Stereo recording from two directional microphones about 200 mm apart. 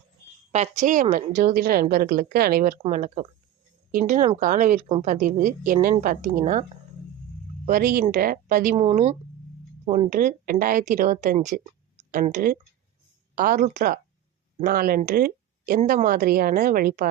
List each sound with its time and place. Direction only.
0.5 s speech: 35° right (ahead or behind)
8.7 s speech: 30° right (ahead or behind)